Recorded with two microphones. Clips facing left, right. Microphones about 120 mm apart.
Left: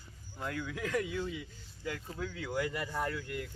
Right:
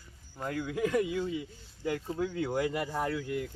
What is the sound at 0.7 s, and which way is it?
A man's voice, 15° right (ahead or behind).